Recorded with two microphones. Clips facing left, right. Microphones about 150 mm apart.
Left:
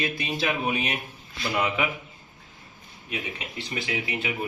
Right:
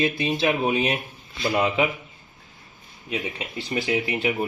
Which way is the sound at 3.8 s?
30° right (ahead or behind).